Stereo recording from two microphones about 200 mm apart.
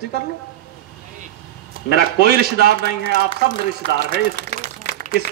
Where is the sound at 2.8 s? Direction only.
50° left (ahead or behind).